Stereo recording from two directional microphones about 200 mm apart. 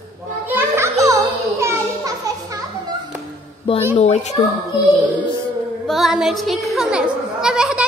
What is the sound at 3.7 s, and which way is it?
Speech, 25° left (ahead or behind).